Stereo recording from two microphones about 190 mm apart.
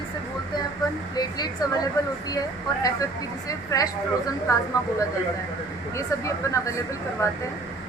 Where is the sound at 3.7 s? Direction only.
15° left (ahead or behind).